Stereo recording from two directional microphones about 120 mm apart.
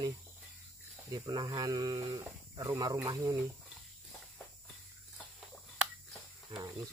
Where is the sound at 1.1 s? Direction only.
30° right (ahead or behind).